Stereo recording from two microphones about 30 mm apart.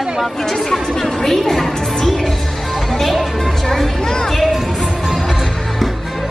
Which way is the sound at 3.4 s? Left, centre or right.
Centre.